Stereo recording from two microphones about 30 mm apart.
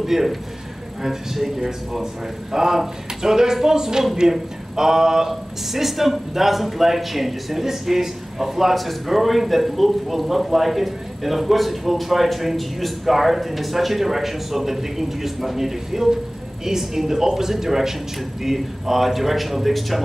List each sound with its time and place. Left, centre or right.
0.0 s speech: centre